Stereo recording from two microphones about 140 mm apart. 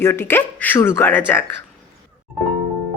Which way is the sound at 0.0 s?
15° left (ahead or behind).